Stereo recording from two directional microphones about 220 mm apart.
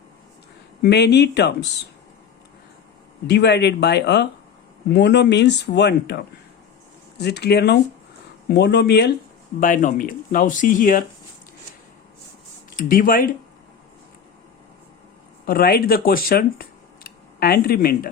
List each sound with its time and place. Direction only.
0.8 s speech: 50° left (ahead or behind)
3.2 s speech: 50° left (ahead or behind)
7.2 s speech: 50° left (ahead or behind)
9.6 s speech: 40° left (ahead or behind)
12.7 s speech: 40° left (ahead or behind)
15.4 s speech: 45° left (ahead or behind)